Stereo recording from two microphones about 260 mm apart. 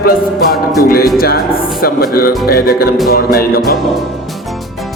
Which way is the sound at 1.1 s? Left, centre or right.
Left.